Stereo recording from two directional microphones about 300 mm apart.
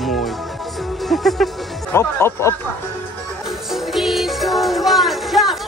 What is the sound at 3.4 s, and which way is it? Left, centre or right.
Music, centre.